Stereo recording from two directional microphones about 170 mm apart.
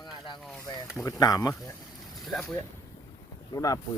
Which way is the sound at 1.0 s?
20° left (ahead or behind).